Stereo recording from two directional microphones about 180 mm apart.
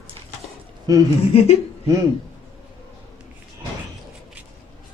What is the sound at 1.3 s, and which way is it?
Speech, 35° left (ahead or behind).